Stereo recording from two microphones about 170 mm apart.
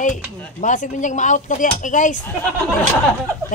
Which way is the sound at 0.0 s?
45° left (ahead or behind).